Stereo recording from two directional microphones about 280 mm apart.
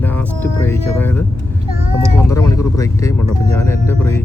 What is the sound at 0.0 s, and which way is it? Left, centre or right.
Music, centre.